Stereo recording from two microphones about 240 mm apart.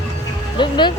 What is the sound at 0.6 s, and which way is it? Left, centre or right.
Speech, centre.